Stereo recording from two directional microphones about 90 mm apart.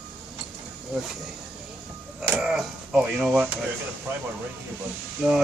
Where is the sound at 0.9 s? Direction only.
5° right (ahead or behind).